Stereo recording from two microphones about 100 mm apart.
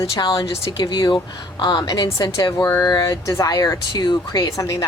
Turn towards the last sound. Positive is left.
turn(degrees=30)  # may be behind; listen again after turning